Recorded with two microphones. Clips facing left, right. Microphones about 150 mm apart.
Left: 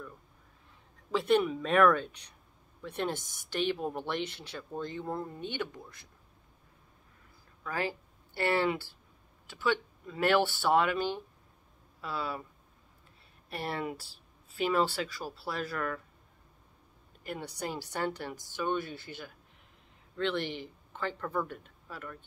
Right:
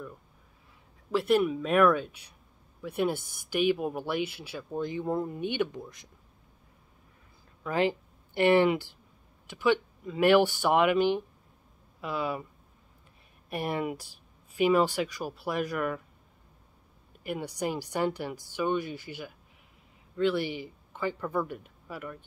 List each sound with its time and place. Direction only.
1.1 s speech: 5° right (ahead or behind)
7.6 s speech: 20° right (ahead or behind)
13.5 s speech: 15° right (ahead or behind)
17.2 s speech: 10° right (ahead or behind)